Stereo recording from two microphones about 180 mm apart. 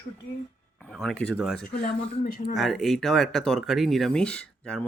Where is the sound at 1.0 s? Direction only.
5° left (ahead or behind).